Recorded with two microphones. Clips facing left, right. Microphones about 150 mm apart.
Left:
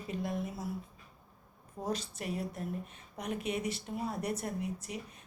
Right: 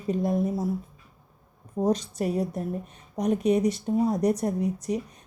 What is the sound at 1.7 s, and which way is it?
Speech, 40° right (ahead or behind).